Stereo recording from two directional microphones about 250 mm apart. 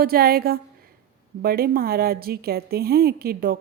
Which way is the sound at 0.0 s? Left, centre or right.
Right.